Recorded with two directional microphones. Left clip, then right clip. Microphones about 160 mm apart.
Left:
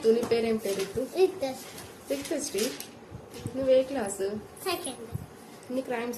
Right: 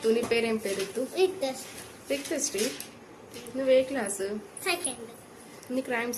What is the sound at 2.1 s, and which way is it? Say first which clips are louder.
A woman's voice: right 1 dB; centre (ahead or behind).